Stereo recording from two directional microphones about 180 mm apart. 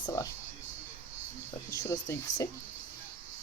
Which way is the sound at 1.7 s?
15° left (ahead or behind).